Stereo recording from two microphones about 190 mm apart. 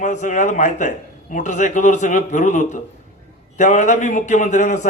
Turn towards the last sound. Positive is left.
turn(degrees=40)  # may be behind; listen again after turning